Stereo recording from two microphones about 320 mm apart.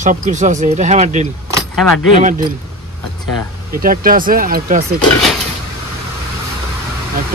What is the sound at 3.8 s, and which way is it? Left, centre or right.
Speech, right.